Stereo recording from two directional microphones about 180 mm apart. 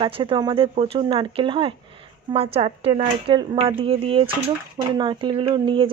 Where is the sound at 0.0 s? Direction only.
30° right (ahead or behind).